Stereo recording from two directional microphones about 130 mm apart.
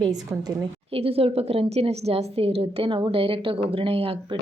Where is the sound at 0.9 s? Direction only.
50° right (ahead or behind).